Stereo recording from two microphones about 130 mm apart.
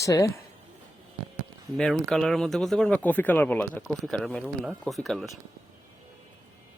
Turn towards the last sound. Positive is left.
turn(degrees=0)  # may be behind; listen again after turning